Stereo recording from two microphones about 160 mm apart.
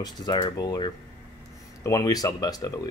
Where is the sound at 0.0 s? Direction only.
25° left (ahead or behind).